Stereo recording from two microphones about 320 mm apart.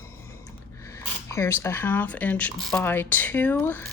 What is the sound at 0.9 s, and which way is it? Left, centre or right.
Speech, centre.